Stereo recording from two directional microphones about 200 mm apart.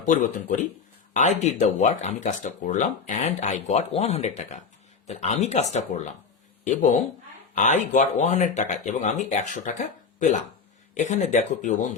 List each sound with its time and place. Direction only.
0.1 s speech: 40° left (ahead or behind)
7.5 s speech: 40° left (ahead or behind)